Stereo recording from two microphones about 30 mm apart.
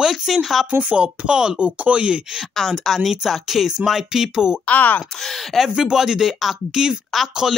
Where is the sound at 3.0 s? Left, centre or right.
Centre.